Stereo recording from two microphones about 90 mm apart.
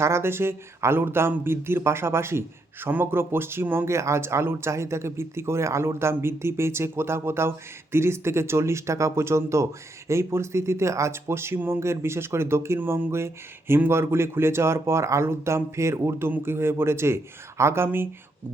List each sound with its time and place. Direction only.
0.0 s speech: 30° right (ahead or behind)